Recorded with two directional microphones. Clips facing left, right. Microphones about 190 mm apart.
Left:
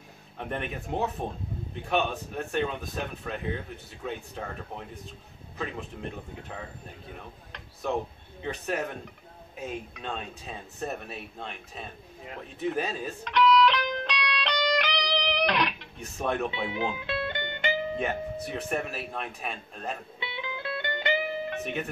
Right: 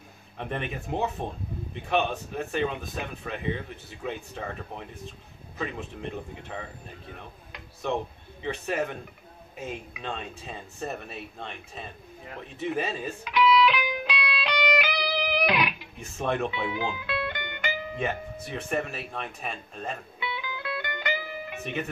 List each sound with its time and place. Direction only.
0.4 s speech: centre (ahead or behind)
7.8 s speech: centre (ahead or behind)
12.5 s music: centre (ahead or behind)
16.4 s music: 25° left (ahead or behind)
17.9 s speech: centre (ahead or behind)
20.2 s music: 25° left (ahead or behind)